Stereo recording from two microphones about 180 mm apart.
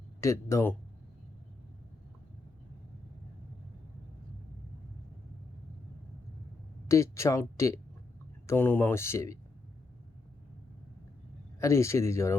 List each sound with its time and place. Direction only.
0.2 s speech: 15° left (ahead or behind)
6.8 s speech: 15° left (ahead or behind)
11.6 s speech: 15° left (ahead or behind)